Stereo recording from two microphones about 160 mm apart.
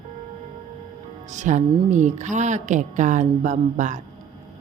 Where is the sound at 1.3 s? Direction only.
50° right (ahead or behind).